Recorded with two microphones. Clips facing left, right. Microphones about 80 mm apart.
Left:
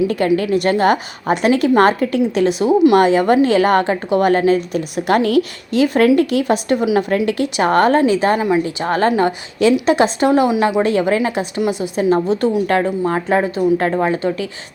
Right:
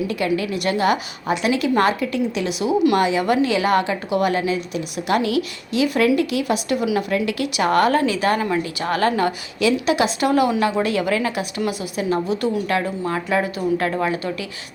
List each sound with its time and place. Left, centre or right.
0.1 s a woman's voice: left; by 8.6 s centre
8.6 s a woman's voice: left